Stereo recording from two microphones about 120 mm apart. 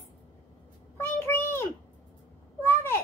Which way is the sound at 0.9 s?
20° left (ahead or behind).